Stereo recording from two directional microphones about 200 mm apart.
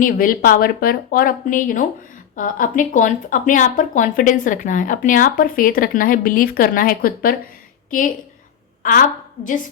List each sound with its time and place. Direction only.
0.0 s a woman's voice: 45° left (ahead or behind)